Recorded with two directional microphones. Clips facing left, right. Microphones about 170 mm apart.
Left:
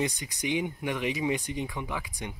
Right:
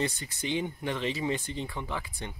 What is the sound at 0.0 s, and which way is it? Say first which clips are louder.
Speech: left 2 dB; 15° left (ahead or behind).